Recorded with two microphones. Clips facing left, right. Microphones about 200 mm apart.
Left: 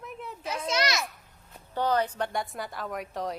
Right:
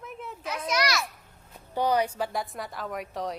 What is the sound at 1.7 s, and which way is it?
A woman's voice, 10° right (ahead or behind).